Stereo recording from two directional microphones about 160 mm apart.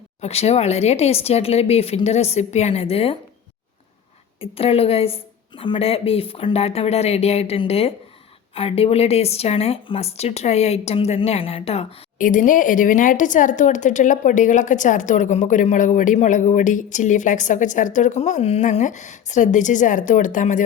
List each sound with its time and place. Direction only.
0.2 s speech: 40° left (ahead or behind)
4.4 s speech: 35° left (ahead or behind)
12.2 s speech: 55° left (ahead or behind)